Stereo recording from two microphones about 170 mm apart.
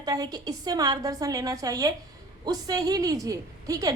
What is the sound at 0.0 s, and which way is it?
A woman's voice, 20° right (ahead or behind).